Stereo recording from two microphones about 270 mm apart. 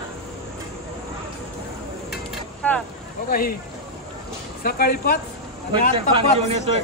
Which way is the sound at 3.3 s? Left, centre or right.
Left.